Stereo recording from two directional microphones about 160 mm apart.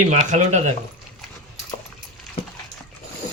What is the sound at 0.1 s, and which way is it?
Speech, 50° right (ahead or behind).